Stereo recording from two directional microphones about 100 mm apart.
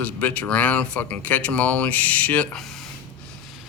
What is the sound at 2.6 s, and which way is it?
Speech, 5° left (ahead or behind).